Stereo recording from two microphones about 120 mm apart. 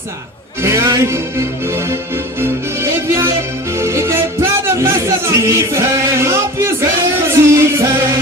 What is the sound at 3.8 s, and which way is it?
Speech, 20° right (ahead or behind).